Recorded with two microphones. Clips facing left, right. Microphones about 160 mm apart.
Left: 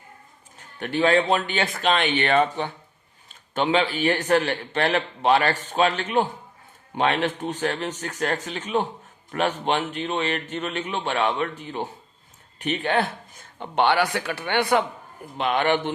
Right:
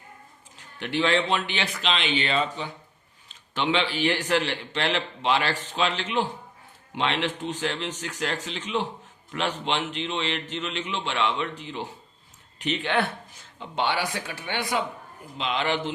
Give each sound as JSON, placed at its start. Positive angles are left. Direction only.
{"t": 0.8, "sound": "a man's voice", "side_deg": 45}
{"t": 3.2, "sound": "a man's voice", "side_deg": 45}
{"t": 13.4, "sound": "a man's voice", "side_deg": 60}